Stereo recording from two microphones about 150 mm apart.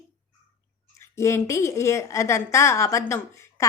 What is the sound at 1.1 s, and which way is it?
A woman's voice, 20° left (ahead or behind).